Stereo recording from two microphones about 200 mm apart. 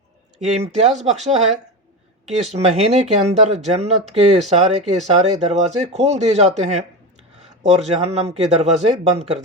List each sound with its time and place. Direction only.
0.3 s speech: 35° right (ahead or behind)